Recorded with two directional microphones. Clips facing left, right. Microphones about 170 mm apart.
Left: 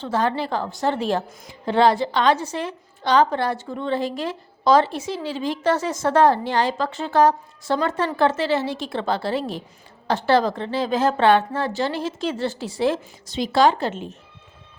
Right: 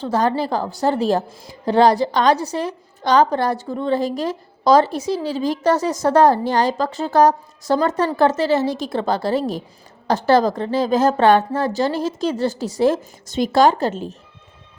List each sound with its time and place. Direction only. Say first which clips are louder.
0.0 s a woman's voice: right 3 dB; 40° right (ahead or behind)